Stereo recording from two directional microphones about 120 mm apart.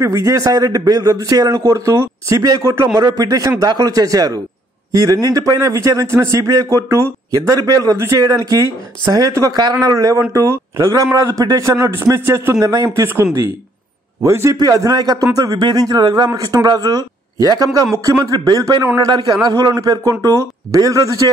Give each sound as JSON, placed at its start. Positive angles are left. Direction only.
{"t": 0.0, "sound": "a man's voice", "side_deg": -30}